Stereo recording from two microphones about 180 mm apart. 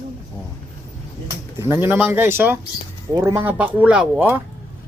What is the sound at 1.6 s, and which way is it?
Speech, 15° right (ahead or behind).